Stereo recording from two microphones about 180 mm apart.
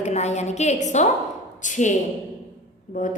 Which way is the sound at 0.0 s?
40° left (ahead or behind).